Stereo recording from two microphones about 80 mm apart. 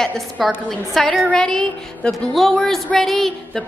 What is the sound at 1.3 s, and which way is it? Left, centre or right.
Speech, centre.